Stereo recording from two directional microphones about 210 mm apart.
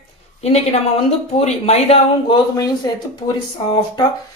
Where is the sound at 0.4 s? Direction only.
30° left (ahead or behind).